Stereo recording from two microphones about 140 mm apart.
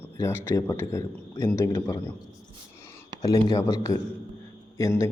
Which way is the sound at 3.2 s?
25° left (ahead or behind).